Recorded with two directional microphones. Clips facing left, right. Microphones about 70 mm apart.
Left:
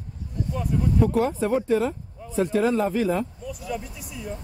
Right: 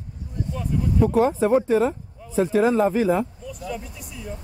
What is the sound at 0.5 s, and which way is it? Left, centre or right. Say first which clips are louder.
Speech: even; centre.